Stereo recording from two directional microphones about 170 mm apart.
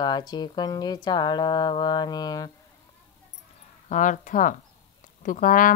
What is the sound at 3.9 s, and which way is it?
Speech, 50° left (ahead or behind).